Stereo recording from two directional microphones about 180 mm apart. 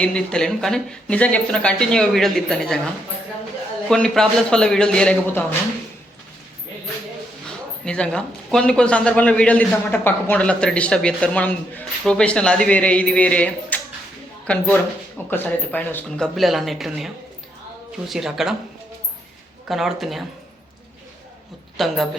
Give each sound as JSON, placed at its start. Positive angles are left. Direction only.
{"t": 0.0, "sound": "speech", "side_deg": 5}
{"t": 3.8, "sound": "speech", "side_deg": 5}
{"t": 7.9, "sound": "a man's voice", "side_deg": 5}
{"t": 18.1, "sound": "speech", "side_deg": 0}
{"t": 19.6, "sound": "speech", "side_deg": 0}
{"t": 21.8, "sound": "speech", "side_deg": 0}